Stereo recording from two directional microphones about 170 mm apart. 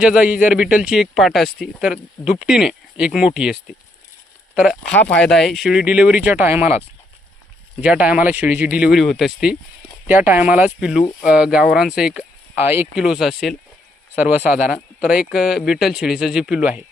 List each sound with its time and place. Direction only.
0.0 s speech: 5° right (ahead or behind)